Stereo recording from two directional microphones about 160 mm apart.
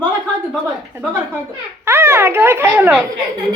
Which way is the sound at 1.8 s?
15° right (ahead or behind).